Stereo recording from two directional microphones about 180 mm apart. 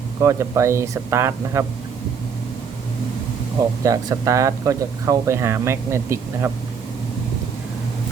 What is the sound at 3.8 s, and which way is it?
Speech, 15° right (ahead or behind).